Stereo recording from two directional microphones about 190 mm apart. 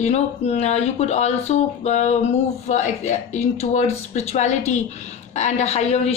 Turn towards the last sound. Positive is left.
turn(degrees=35)  # may be behind; listen again after turning